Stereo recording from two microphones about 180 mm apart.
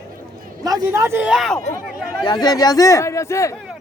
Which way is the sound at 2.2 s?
20° left (ahead or behind).